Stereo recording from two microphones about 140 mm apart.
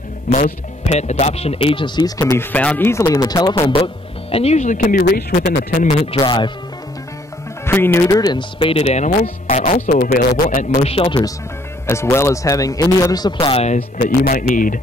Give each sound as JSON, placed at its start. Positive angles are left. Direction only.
{"t": 0.3, "sound": "speech", "side_deg": 60}
{"t": 6.1, "sound": "speech", "side_deg": 35}
{"t": 7.6, "sound": "speech", "side_deg": 15}
{"t": 10.1, "sound": "speech", "side_deg": 90}
{"t": 10.9, "sound": "speech", "side_deg": 40}
{"t": 11.8, "sound": "speech", "side_deg": 20}
{"t": 14.0, "sound": "speech", "side_deg": 90}